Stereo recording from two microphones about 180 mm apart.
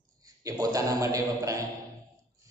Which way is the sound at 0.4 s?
20° right (ahead or behind).